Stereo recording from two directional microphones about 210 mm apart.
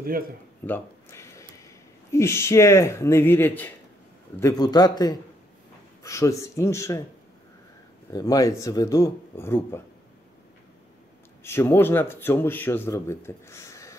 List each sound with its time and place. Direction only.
0.0 s speech: 45° right (ahead or behind)
0.7 s a sound: 10° left (ahead or behind)
2.0 s a man's voice: 15° left (ahead or behind)
8.1 s speech: 15° left (ahead or behind)
11.4 s speech: 10° left (ahead or behind)